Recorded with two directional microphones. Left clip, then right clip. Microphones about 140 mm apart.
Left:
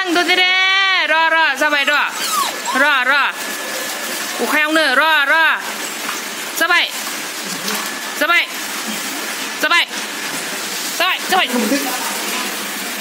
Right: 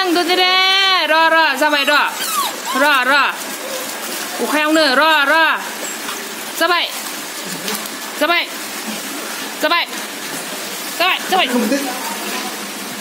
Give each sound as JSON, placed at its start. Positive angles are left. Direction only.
{"t": 0.1, "sound": "a man's voice", "side_deg": -5}
{"t": 4.6, "sound": "a man's voice", "side_deg": -5}
{"t": 6.6, "sound": "speech", "side_deg": -10}
{"t": 8.2, "sound": "speech", "side_deg": -10}
{"t": 9.6, "sound": "speech", "side_deg": -15}
{"t": 11.0, "sound": "speech", "side_deg": -5}